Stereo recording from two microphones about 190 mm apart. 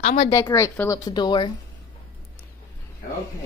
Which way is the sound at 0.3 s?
15° left (ahead or behind).